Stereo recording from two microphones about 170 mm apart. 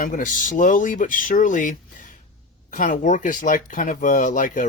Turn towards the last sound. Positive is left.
turn(degrees=50)  # may be behind; listen again after turning